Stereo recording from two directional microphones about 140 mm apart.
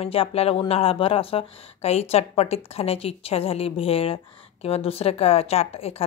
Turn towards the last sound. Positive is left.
turn(degrees=45)  # may be behind; listen again after turning